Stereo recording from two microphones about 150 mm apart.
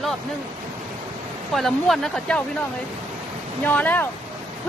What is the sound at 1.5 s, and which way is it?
Speech, centre (ahead or behind).